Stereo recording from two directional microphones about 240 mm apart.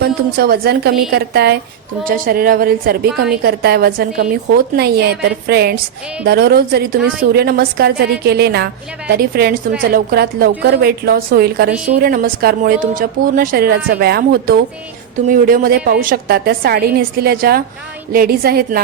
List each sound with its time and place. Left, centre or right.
0.0 s a woman's voice: right